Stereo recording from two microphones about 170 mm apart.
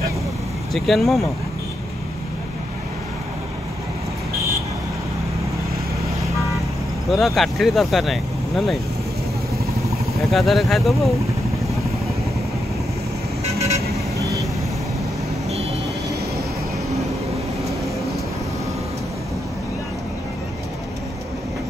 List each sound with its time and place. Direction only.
0.7 s speech: centre (ahead or behind)
7.1 s speech: centre (ahead or behind)
10.3 s speech: centre (ahead or behind)
13.5 s vehicle: 40° right (ahead or behind)